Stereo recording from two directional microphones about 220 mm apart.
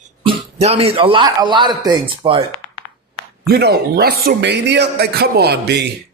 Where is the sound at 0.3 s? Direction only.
25° right (ahead or behind).